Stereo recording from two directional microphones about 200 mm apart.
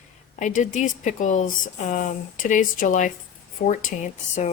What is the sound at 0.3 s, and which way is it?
Speech, 40° left (ahead or behind).